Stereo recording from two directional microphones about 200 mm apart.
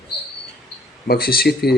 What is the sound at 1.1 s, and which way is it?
Speech, 50° left (ahead or behind).